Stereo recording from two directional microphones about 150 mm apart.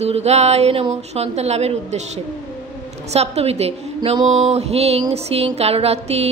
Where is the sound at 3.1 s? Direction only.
45° right (ahead or behind).